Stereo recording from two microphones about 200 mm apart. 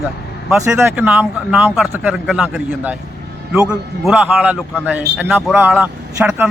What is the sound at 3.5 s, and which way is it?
Speech, 5° right (ahead or behind).